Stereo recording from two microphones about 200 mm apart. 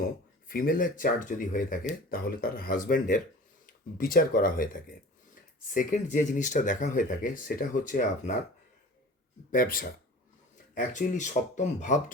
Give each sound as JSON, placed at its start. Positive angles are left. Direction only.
{"t": 0.0, "sound": "speech", "side_deg": 45}
{"t": 9.5, "sound": "speech", "side_deg": 45}